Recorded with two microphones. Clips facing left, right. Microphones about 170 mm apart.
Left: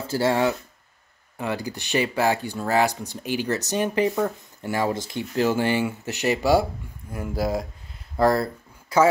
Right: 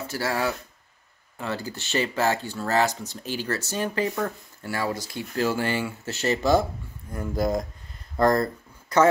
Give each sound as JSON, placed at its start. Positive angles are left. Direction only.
{"t": 0.0, "sound": "speech", "side_deg": 25}